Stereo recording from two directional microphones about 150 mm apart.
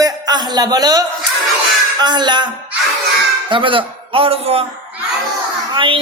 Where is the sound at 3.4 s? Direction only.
35° right (ahead or behind).